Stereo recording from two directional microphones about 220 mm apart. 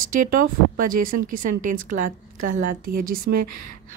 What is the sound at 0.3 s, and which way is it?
A woman's voice, 40° right (ahead or behind).